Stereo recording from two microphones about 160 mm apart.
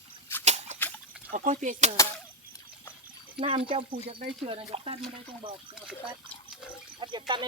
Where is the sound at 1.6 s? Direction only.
50° right (ahead or behind).